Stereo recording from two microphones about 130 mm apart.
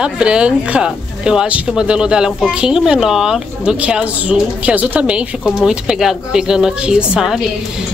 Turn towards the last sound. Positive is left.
turn(degrees=-5)  # may be behind; listen again after turning